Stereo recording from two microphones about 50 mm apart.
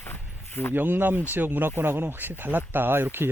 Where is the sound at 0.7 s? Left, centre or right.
Right.